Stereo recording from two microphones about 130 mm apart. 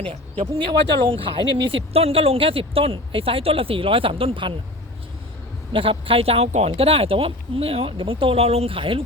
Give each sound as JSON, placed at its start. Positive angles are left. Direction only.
{"t": 0.1, "sound": "speech", "side_deg": -45}
{"t": 5.7, "sound": "speech", "side_deg": -45}